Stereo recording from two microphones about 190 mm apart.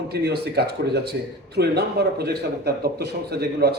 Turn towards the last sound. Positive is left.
turn(degrees=-55)  # may be behind; listen again after turning